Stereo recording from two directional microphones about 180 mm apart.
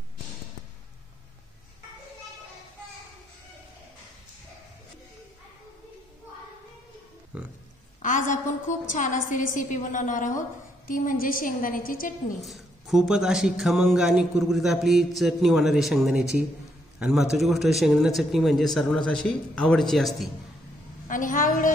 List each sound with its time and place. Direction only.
7.3 s speech: 5° right (ahead or behind)
8.0 s a woman's voice: 45° left (ahead or behind)
12.4 s speech: centre (ahead or behind)
21.1 s a woman's voice: 50° left (ahead or behind)